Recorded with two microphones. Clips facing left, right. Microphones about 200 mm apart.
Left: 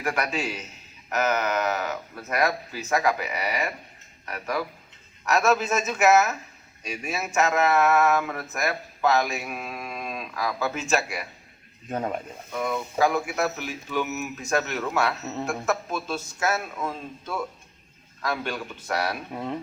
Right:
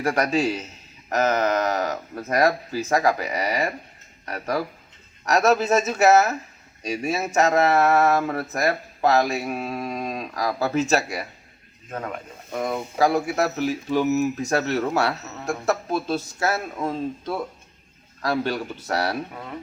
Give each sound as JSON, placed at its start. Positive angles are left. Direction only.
{"t": 0.0, "sound": "speech", "side_deg": -40}
{"t": 11.9, "sound": "a man's voice", "side_deg": 25}
{"t": 12.5, "sound": "speech", "side_deg": -40}